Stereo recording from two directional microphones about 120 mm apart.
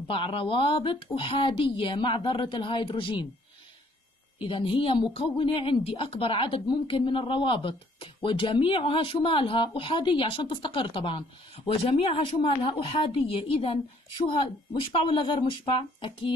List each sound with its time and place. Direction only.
0.1 s a woman's voice: 50° left (ahead or behind)
4.4 s a woman's voice: 45° left (ahead or behind)